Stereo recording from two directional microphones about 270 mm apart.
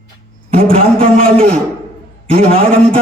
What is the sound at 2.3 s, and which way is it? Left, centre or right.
Speech, right.